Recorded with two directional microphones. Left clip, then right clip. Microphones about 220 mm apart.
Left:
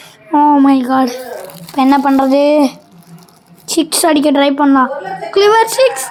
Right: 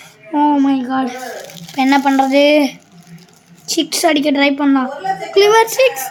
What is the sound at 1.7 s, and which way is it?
A woman's voice, 5° left (ahead or behind).